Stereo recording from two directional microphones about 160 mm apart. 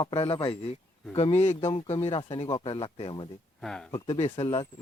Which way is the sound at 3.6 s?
5° left (ahead or behind).